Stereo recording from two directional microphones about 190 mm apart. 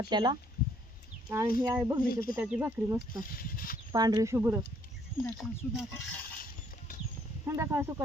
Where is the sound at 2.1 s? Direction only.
50° left (ahead or behind).